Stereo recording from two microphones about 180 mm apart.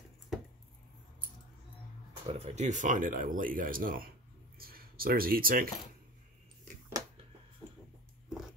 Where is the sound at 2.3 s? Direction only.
40° right (ahead or behind).